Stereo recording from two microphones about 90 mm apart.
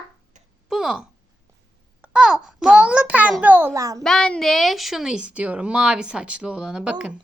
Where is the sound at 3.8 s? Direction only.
40° right (ahead or behind).